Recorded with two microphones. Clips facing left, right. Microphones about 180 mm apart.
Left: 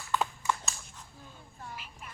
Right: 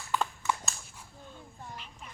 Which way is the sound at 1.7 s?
10° left (ahead or behind).